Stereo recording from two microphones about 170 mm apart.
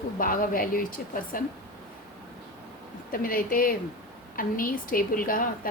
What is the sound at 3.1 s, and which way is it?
A woman's voice, 55° left (ahead or behind).